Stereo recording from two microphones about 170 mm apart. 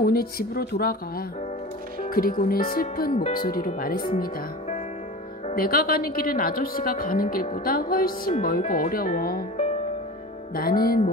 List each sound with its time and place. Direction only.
0.0 s speech: 60° left (ahead or behind)
5.5 s speech: 60° left (ahead or behind)
10.5 s speech: 60° left (ahead or behind)